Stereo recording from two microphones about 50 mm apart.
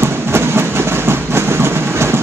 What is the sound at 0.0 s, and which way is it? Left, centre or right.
Train, right.